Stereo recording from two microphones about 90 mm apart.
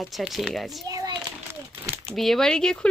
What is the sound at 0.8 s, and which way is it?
Speech, 45° right (ahead or behind).